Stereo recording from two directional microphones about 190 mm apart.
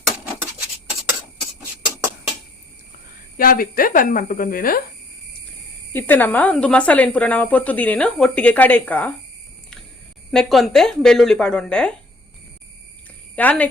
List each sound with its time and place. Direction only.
3.3 s speech: 45° left (ahead or behind)
5.9 s speech: 10° left (ahead or behind)
10.3 s speech: centre (ahead or behind)
13.3 s speech: 5° left (ahead or behind)